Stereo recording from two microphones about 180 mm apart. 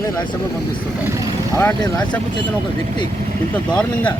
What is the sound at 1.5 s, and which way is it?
Speech, 15° left (ahead or behind).